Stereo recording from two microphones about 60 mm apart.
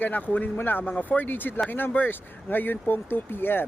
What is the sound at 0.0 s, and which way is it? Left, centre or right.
Speech, left.